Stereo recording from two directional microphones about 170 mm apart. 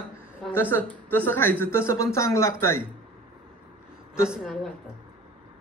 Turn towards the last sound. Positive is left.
turn(degrees=0)  # may be behind; listen again after turning